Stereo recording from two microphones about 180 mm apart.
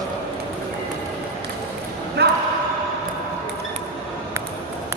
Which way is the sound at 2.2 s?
65° right (ahead or behind).